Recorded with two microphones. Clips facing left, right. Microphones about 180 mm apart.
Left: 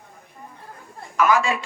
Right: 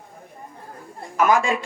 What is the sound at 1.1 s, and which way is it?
Speech, 50° right (ahead or behind).